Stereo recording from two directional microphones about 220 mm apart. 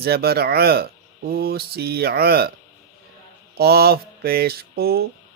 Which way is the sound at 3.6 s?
45° right (ahead or behind).